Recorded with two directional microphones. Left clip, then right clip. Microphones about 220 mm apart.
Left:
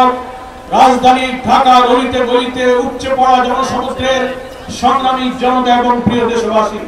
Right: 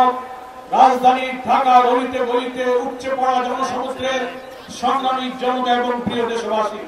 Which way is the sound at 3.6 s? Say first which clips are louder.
Left 7 dB; 15° left (ahead or behind).